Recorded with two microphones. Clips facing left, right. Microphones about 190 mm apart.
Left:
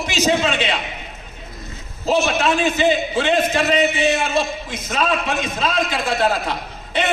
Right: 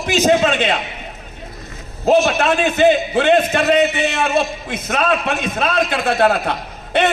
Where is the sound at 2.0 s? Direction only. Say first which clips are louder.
Right 4 dB; 60° right (ahead or behind).